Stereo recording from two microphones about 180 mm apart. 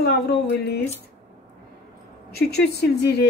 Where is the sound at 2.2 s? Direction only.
60° left (ahead or behind).